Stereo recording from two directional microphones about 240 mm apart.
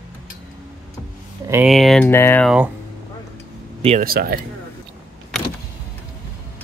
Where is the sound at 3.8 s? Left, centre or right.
Right.